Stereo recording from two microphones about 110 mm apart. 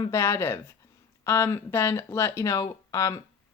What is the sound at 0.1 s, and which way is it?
Speech, 25° left (ahead or behind).